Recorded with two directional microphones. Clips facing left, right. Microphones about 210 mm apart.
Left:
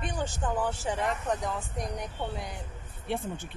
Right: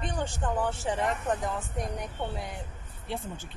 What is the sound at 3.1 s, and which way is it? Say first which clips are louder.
Speech: left 3 dB; 60° left (ahead or behind).